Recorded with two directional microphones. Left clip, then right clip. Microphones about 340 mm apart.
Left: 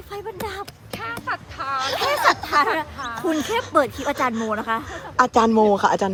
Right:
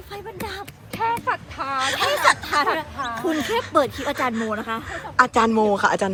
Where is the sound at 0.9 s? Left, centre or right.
Centre.